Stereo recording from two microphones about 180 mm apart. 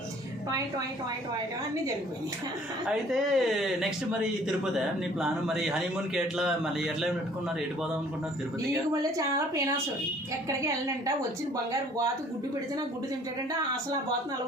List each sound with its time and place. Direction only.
2.9 s speech: centre (ahead or behind)
8.7 s a woman's voice: 15° right (ahead or behind)